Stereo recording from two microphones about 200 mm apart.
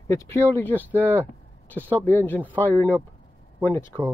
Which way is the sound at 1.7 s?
10° right (ahead or behind).